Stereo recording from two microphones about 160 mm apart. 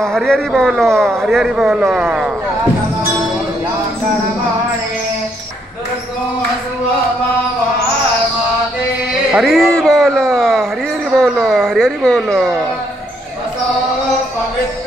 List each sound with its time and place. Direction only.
0.0 s a man's voice: 5° left (ahead or behind)
9.3 s a man's voice: centre (ahead or behind)